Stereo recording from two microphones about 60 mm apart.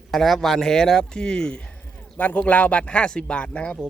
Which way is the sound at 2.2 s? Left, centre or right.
Left.